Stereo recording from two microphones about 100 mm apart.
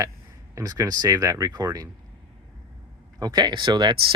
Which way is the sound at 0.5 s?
35° right (ahead or behind).